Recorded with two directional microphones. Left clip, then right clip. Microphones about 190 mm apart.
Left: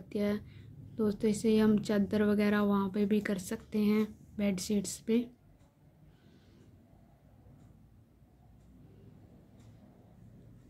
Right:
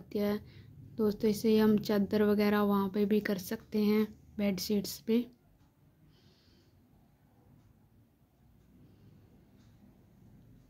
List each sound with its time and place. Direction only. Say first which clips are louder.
0.1 s a woman's voice: right 1 dB; 20° right (ahead or behind)